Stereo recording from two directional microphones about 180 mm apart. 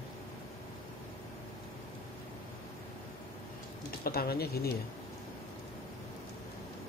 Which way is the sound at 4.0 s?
60° left (ahead or behind).